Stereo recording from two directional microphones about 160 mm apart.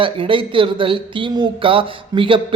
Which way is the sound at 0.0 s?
30° right (ahead or behind).